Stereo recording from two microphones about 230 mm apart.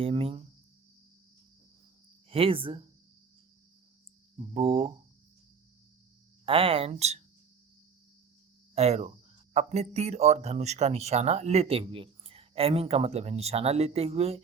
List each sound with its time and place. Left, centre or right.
0.0 s speech: right
2.3 s speech: right
4.5 s speech: right
6.4 s speech: right
8.7 s speech: right